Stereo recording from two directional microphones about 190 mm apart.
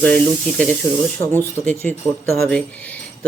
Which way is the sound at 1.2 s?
15° left (ahead or behind).